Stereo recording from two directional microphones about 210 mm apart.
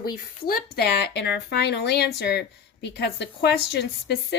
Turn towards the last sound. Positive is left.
turn(degrees=50)  # may be behind; listen again after turning